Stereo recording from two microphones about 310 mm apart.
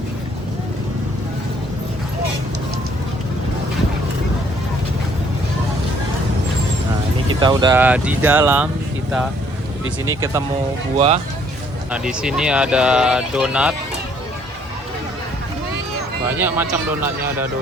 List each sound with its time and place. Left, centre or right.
7.3 s speech: centre
10.9 s speech: centre
11.9 s speech: centre
16.2 s speech: centre